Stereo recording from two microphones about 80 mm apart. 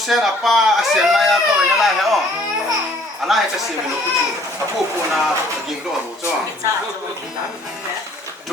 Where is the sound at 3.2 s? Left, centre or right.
Centre.